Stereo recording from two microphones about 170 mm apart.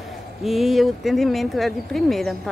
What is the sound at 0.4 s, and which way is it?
Speech, centre (ahead or behind).